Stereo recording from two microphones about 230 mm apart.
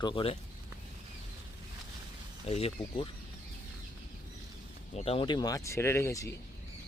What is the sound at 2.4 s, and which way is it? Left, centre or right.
Speech, left.